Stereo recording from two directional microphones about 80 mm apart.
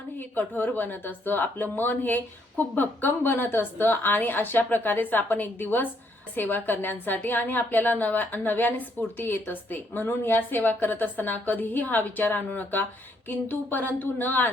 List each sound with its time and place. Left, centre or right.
0.2 s a woman's voice: left